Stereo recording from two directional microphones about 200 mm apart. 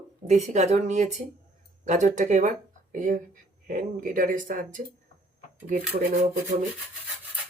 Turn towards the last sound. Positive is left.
turn(degrees=-35)  # may be behind; listen again after turning